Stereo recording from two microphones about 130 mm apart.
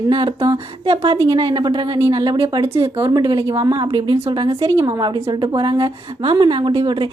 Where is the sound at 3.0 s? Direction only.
30° right (ahead or behind).